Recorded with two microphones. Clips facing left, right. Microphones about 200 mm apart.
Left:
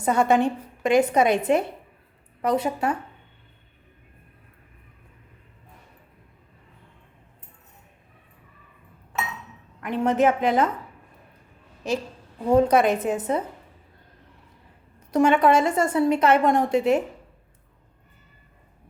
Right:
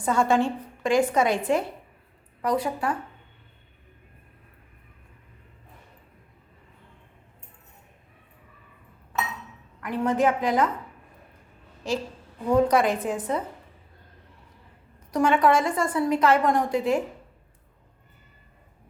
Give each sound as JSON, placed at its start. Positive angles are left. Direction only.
{"t": 0.0, "sound": "a woman's voice", "side_deg": 20}
{"t": 2.4, "sound": "a woman's voice", "side_deg": 25}
{"t": 9.8, "sound": "a woman's voice", "side_deg": 25}
{"t": 11.9, "sound": "a woman's voice", "side_deg": 20}
{"t": 15.1, "sound": "a woman's voice", "side_deg": 25}